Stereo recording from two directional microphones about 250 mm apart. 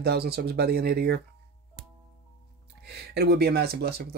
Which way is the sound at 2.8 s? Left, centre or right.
Right.